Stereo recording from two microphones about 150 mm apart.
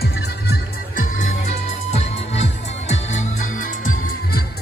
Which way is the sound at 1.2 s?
50° left (ahead or behind).